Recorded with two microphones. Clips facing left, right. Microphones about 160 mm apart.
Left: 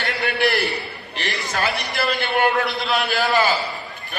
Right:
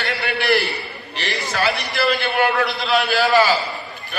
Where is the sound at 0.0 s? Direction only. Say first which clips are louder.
Left 2 dB; 45° left (ahead or behind).